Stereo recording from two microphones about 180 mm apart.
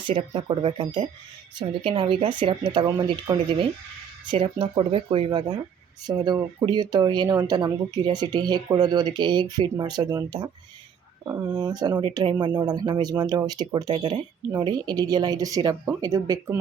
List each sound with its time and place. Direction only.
0.1 s speech: 30° right (ahead or behind)